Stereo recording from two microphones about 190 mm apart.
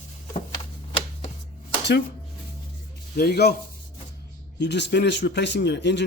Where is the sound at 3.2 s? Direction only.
60° left (ahead or behind).